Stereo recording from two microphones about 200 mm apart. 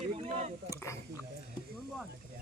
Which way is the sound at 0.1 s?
30° right (ahead or behind).